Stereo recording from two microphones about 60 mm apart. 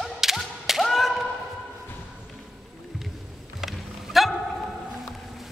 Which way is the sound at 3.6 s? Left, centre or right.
Centre.